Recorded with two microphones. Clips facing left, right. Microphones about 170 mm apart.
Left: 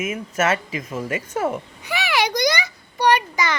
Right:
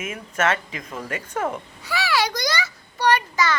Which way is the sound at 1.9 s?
20° left (ahead or behind).